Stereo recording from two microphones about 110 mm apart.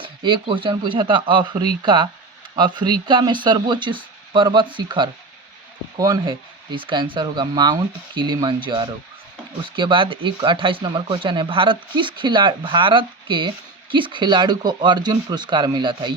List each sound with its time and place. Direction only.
0.0 s speech: 50° right (ahead or behind)